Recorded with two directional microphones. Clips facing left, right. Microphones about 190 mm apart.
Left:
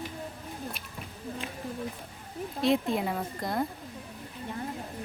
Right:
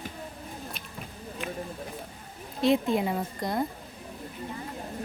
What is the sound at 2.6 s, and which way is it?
A woman's voice, centre (ahead or behind).